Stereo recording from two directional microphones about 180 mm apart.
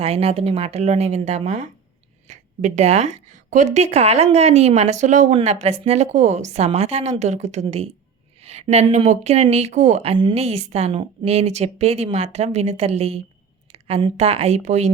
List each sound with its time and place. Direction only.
0.0 s a woman's voice: 35° right (ahead or behind)